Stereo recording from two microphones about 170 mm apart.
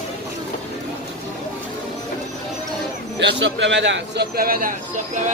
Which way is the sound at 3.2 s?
90° right.